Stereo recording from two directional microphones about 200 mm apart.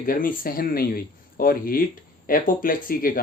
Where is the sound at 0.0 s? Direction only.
45° left (ahead or behind).